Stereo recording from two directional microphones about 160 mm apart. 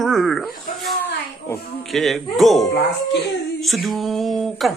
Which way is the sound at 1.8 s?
Centre (ahead or behind).